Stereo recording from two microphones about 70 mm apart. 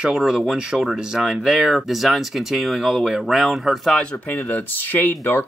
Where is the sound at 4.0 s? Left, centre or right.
Left.